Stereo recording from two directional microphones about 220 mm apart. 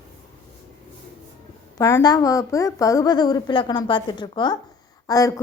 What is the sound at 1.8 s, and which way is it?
A woman's voice, 15° left (ahead or behind).